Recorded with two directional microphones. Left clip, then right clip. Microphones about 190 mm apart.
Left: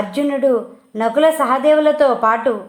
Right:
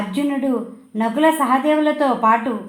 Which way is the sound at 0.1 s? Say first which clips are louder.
Left 6 dB; 45° left (ahead or behind).